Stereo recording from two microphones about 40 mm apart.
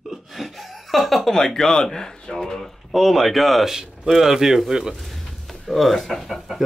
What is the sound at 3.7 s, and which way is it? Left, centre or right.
Speech, centre.